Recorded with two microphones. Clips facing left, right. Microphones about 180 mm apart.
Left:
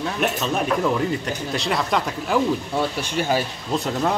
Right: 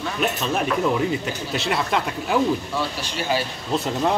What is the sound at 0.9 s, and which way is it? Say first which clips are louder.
Speech: even; 5° right (ahead or behind).